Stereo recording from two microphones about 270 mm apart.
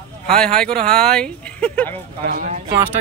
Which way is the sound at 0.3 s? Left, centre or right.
Centre.